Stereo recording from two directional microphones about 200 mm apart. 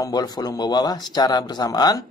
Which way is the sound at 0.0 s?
20° left (ahead or behind).